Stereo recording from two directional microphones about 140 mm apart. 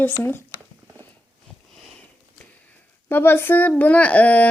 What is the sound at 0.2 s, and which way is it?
Speech, 15° left (ahead or behind).